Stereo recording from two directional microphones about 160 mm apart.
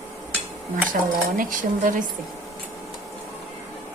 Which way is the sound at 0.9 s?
55° right (ahead or behind).